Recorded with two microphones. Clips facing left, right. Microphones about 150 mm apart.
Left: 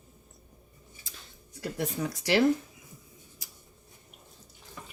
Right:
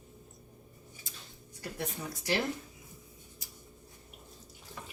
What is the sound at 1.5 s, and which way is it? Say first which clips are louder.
Speech: left 7 dB; 85° left.